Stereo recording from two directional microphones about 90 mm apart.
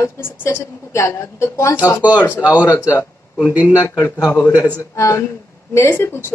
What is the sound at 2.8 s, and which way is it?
Speech, 25° left (ahead or behind).